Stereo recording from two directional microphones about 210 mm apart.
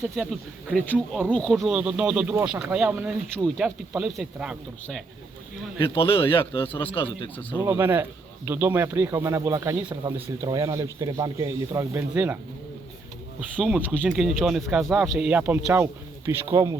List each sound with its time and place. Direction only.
0.2 s speech: centre (ahead or behind)
5.8 s a man's voice: 25° left (ahead or behind)
7.5 s speech: 10° right (ahead or behind)
13.6 s speech: 5° right (ahead or behind)